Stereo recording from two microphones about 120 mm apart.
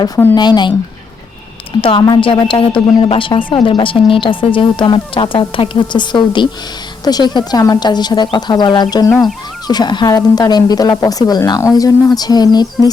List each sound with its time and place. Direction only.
0.3 s speech: 35° left (ahead or behind)
1.8 s a woman's voice: 45° left (ahead or behind)